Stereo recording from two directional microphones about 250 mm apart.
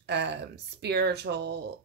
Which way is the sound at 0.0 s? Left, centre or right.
Right.